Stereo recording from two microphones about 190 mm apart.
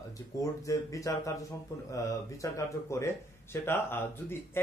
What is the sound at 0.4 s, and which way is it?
A man's voice, 15° left (ahead or behind).